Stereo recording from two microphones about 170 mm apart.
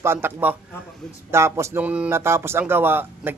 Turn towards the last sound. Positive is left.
turn(degrees=-10)  # may be behind; listen again after turning